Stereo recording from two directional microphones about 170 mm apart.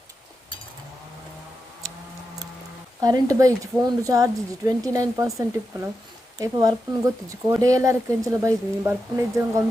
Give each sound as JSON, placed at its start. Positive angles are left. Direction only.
{"t": 3.0, "sound": "speech", "side_deg": -20}